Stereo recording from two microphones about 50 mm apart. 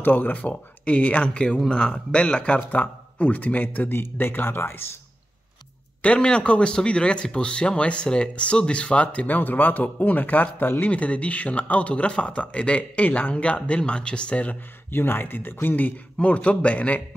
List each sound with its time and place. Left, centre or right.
0.0 s speech: left
0.4 s speech: left
6.0 s speech: left
14.9 s speech: left